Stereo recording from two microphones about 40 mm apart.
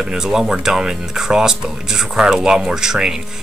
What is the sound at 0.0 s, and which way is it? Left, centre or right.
Speech, centre.